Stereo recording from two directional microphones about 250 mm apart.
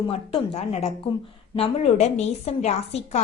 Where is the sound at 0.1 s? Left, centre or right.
Left.